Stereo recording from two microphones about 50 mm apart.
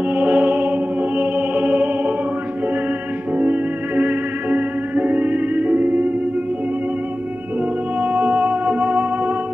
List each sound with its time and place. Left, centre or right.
0.1 s music: right
3.3 s music: right
8.0 s music: right